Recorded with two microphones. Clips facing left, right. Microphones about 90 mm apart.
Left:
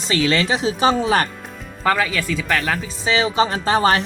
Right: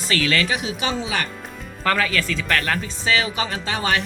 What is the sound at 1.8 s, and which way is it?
Speech, 15° left (ahead or behind).